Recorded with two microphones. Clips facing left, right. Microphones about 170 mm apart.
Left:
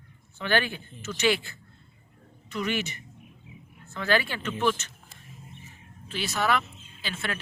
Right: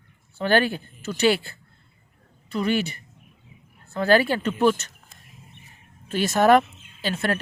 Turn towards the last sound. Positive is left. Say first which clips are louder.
# right 9 dB
turn(degrees=-40)  # may be behind; listen again after turning